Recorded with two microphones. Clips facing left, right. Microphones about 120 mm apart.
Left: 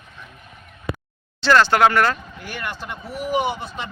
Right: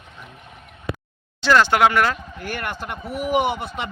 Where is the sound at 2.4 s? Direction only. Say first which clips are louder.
Right 2 dB; 50° right (ahead or behind).